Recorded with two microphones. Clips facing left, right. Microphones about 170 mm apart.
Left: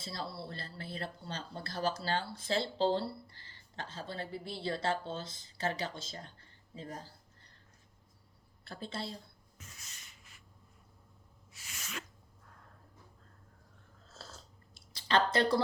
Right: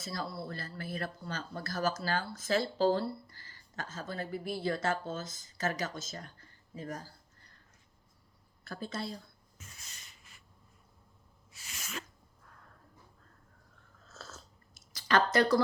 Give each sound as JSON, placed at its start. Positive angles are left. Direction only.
{"t": 0.0, "sound": "speech", "side_deg": 25}
{"t": 6.0, "sound": "a sound", "side_deg": 30}
{"t": 8.6, "sound": "speech", "side_deg": 25}
{"t": 11.8, "sound": "sneeze", "side_deg": -40}
{"t": 14.1, "sound": "biting", "side_deg": 30}
{"t": 14.8, "sound": "speech", "side_deg": 25}